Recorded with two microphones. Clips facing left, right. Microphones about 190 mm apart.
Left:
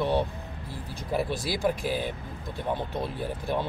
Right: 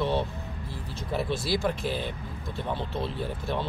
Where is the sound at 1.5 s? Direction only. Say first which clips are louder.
Left 1 dB; 15° left (ahead or behind).